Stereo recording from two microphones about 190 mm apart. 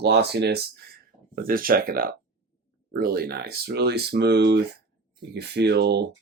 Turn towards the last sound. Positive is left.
turn(degrees=-60)  # may be behind; listen again after turning